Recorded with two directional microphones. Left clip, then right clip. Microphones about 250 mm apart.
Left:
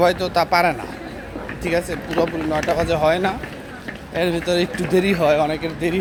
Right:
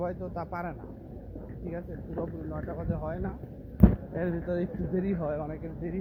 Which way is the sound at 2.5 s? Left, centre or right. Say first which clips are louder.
Left 18 dB; left.